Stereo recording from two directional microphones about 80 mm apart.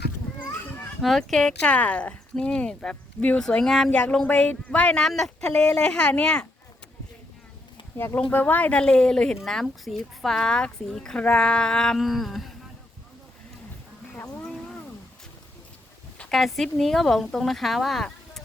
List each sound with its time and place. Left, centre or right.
1.0 s speech: centre
5.0 s speech: centre
7.9 s speech: left; by 12.5 s centre
16.3 s speech: centre